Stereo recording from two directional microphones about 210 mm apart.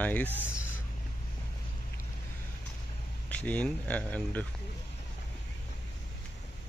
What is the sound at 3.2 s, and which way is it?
Speech, 5° left (ahead or behind).